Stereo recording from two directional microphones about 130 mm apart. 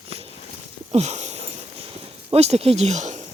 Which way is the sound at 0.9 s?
60° right (ahead or behind).